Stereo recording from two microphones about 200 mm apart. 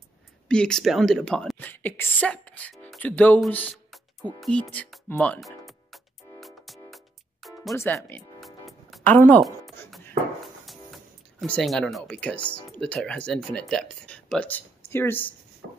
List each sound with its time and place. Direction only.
0.5 s speech: 5° left (ahead or behind)
4.7 s music: 5° left (ahead or behind)
7.7 s speech: 10° left (ahead or behind)
8.4 s music: centre (ahead or behind)
11.4 s speech: 5° left (ahead or behind)
15.6 s a sound: 60° right (ahead or behind)